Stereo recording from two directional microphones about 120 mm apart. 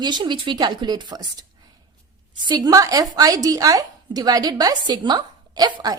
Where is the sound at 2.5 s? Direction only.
30° right (ahead or behind).